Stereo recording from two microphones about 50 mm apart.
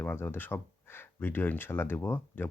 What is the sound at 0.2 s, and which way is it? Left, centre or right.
Speech, left.